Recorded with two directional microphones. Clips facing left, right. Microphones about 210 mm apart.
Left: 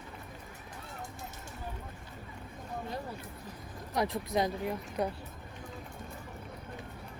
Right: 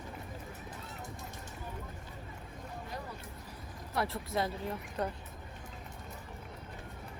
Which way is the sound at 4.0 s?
15° left (ahead or behind).